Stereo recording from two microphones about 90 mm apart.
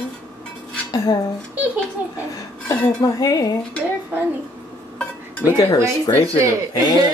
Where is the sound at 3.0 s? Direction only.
45° left (ahead or behind).